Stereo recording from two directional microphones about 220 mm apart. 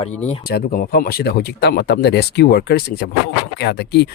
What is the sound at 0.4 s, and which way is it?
Speech, 40° left (ahead or behind).